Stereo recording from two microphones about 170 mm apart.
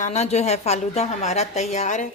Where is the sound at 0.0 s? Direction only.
40° left (ahead or behind).